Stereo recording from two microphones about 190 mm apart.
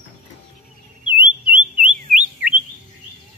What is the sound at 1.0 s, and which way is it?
Music, 25° left (ahead or behind).